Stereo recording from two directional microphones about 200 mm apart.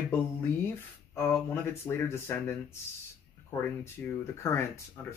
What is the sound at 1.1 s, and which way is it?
Speech, 10° left (ahead or behind).